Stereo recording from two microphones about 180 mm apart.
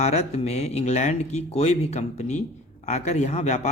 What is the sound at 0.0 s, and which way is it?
Speech, 35° left (ahead or behind).